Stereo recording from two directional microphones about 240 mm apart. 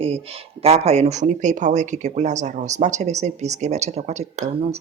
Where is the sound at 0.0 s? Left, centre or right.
Right.